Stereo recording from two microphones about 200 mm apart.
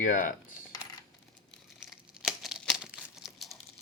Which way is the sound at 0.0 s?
40° left (ahead or behind).